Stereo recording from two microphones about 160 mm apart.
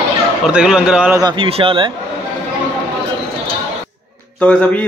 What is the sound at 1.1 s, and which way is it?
Speech, 30° right (ahead or behind).